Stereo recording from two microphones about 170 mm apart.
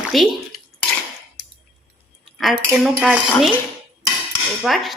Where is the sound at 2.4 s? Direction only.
Centre (ahead or behind).